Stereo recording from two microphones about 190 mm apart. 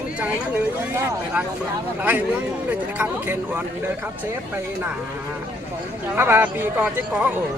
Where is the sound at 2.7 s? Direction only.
10° right (ahead or behind).